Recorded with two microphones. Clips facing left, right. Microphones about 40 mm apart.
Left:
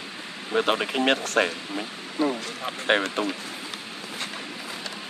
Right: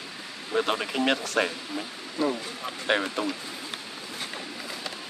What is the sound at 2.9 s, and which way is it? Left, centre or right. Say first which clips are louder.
Speech: left 3 dB; left.